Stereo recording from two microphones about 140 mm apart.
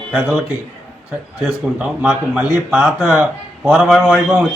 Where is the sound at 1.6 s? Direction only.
10° right (ahead or behind).